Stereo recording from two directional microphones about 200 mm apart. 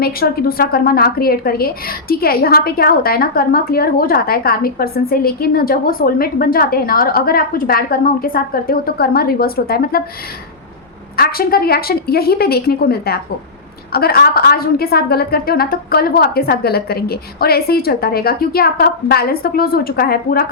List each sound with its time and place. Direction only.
0.0 s a woman's voice: 50° left (ahead or behind)
11.2 s a woman's voice: 50° left (ahead or behind)